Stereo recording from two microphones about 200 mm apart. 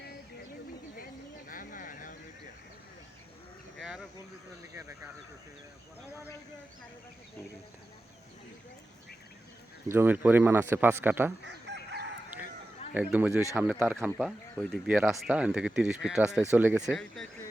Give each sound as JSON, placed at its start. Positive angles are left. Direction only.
{"t": 1.5, "sound": "a sound", "side_deg": 40}
{"t": 3.8, "sound": "a sound", "side_deg": 0}
{"t": 4.7, "sound": "speech", "side_deg": -15}
{"t": 9.9, "sound": "speech", "side_deg": -10}
{"t": 11.4, "sound": "chicken", "side_deg": -60}
{"t": 12.9, "sound": "speech", "side_deg": -10}